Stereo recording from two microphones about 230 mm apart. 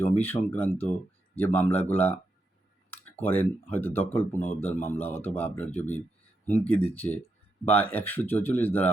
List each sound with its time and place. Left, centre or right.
0.0 s speech: centre
2.9 s speech: centre